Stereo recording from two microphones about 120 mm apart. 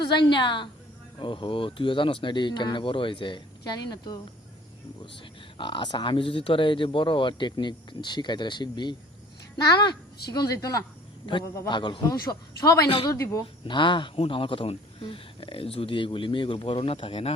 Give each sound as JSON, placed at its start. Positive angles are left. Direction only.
{"t": 0.2, "sound": "speech", "side_deg": 40}
{"t": 11.7, "sound": "speech", "side_deg": 40}
{"t": 13.7, "sound": "speech", "side_deg": 40}